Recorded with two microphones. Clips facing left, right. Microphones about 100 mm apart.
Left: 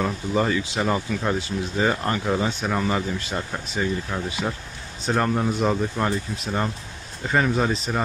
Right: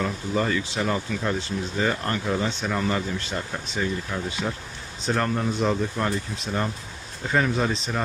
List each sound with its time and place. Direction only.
0.0 s speech: 15° left (ahead or behind)